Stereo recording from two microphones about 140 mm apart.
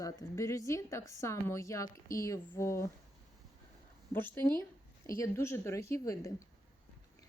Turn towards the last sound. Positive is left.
turn(degrees=20)  # may be behind; listen again after turning